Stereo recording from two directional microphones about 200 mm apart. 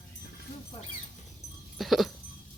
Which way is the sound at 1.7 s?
Centre (ahead or behind).